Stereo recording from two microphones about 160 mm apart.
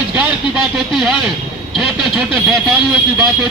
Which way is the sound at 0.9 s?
5° right (ahead or behind).